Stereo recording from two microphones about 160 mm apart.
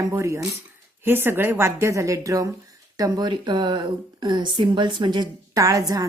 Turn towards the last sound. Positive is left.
turn(degrees=-20)  # may be behind; listen again after turning